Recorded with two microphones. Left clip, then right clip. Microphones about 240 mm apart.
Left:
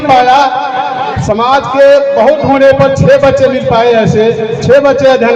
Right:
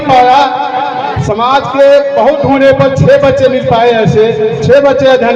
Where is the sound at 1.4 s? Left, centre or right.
Left.